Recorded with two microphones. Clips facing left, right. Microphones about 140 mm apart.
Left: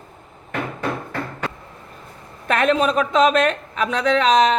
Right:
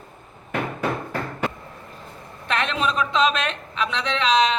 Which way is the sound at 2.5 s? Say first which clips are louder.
Left 6 dB; 45° left (ahead or behind).